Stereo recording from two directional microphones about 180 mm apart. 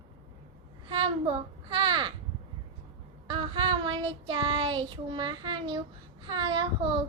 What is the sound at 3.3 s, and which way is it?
Child singing, 25° right (ahead or behind).